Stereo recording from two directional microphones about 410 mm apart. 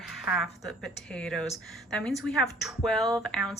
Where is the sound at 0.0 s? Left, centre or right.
Centre.